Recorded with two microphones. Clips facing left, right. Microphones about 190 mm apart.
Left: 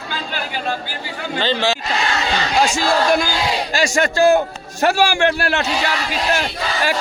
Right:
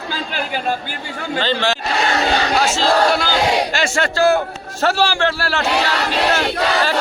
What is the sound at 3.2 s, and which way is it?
Crowd, 70° right (ahead or behind).